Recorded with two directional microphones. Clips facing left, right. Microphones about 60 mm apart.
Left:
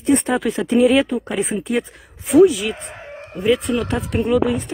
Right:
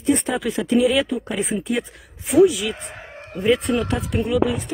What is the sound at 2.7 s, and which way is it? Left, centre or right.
Chicken, left.